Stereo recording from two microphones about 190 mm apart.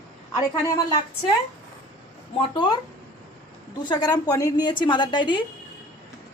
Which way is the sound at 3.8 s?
20° left (ahead or behind).